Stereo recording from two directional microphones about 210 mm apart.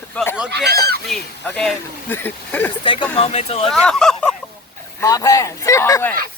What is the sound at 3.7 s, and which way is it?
Speech, 5° left (ahead or behind).